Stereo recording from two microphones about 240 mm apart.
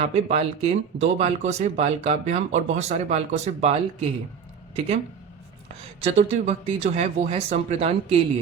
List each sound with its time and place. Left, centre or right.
0.0 s speech: right
6.0 s speech: right